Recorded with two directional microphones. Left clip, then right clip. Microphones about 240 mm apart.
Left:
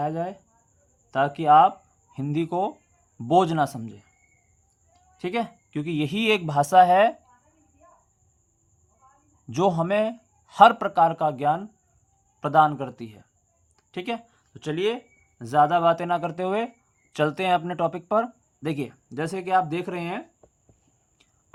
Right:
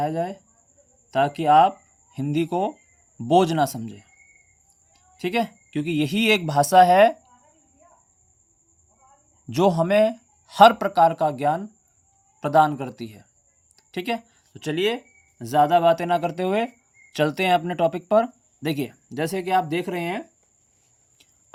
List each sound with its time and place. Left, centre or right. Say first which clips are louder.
0.0 s speech: right 3 dB; right
9.5 s speech: right 3 dB; right